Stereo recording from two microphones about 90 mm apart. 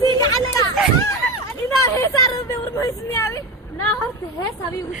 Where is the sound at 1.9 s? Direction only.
35° left (ahead or behind).